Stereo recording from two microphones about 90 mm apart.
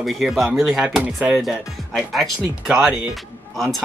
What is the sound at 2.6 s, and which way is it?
Speech, 10° right (ahead or behind).